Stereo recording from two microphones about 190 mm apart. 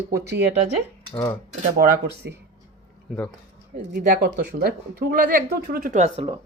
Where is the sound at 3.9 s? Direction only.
55° right (ahead or behind); by 6.2 s 40° right (ahead or behind).